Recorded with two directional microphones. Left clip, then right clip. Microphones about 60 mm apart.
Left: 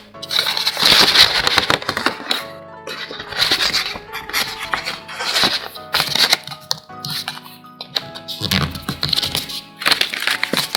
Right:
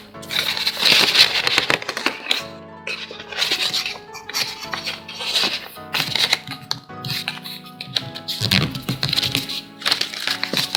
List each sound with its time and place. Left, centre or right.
0.3 s music: centre
0.8 s a sound: left
1.5 s typewriter: centre
1.8 s a sound: centre
2.8 s music: left
4.9 s music: left
8.3 s music: centre
8.6 s music: left
9.8 s music: left
10.5 s music: left